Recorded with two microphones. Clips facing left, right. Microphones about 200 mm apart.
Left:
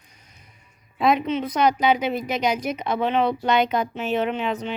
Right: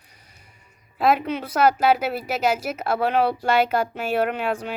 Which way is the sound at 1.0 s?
5° right (ahead or behind).